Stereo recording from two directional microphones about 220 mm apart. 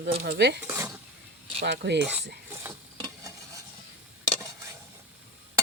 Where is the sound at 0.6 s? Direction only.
10° right (ahead or behind).